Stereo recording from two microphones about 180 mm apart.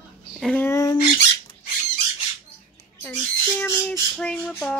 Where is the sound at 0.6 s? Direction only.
20° left (ahead or behind).